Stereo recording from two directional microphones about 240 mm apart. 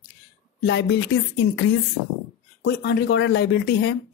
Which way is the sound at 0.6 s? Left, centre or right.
Left.